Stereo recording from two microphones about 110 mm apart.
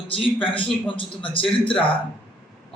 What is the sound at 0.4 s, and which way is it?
A man's voice, 50° left (ahead or behind).